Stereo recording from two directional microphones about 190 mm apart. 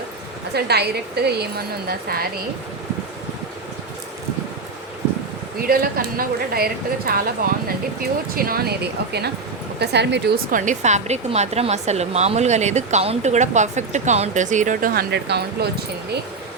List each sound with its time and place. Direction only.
0.5 s speech: 60° right (ahead or behind)
5.5 s a woman's voice: 50° right (ahead or behind)
8.4 s speech: 50° right (ahead or behind)